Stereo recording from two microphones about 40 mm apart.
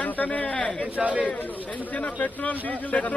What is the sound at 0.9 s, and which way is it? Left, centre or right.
Speech, right.